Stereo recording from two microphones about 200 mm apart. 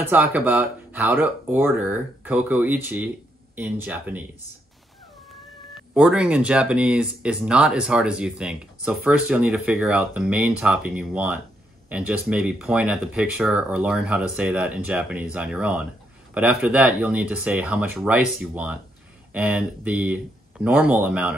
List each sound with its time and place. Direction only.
0.0 s speech: 10° right (ahead or behind)
5.9 s speech: 5° right (ahead or behind)